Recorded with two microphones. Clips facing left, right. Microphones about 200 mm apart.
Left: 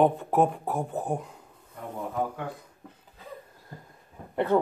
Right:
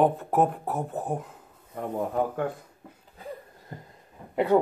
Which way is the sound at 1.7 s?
50° right (ahead or behind).